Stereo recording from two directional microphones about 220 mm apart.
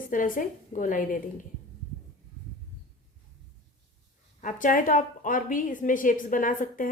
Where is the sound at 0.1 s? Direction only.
40° left (ahead or behind).